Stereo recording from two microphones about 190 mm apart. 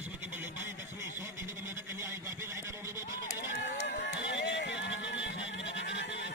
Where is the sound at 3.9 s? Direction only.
60° left (ahead or behind).